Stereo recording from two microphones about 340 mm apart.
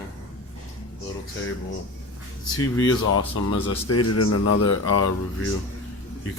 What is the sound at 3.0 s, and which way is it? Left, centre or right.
Speech, left.